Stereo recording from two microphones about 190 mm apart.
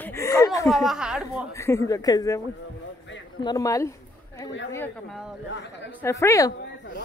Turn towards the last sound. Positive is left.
turn(degrees=15)  # may be behind; listen again after turning